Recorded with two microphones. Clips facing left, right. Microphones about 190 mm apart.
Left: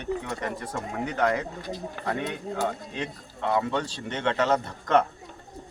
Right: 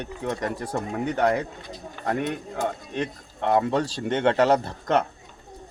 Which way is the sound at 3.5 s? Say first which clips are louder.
Right 4 dB; 35° right (ahead or behind).